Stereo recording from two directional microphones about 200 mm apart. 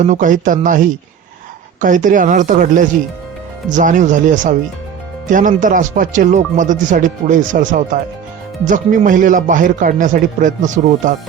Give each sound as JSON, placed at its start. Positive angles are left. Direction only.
{"t": 0.0, "sound": "speech", "side_deg": -40}